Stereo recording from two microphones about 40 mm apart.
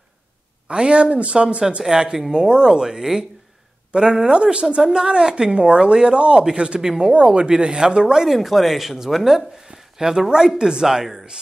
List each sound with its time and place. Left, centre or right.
0.7 s a woman's voice: right
8.4 s speech: centre